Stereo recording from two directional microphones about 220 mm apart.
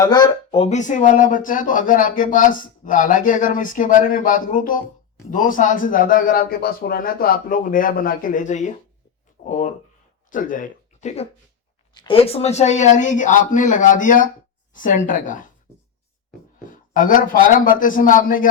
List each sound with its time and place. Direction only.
0.0 s speech: 20° left (ahead or behind); by 15.4 s 35° left (ahead or behind)
16.6 s speech: 40° left (ahead or behind)